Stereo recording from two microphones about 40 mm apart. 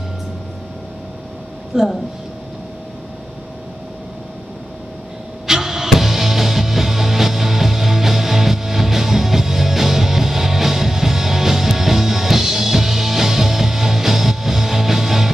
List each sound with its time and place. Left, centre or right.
1.7 s speech: centre
5.5 s music: centre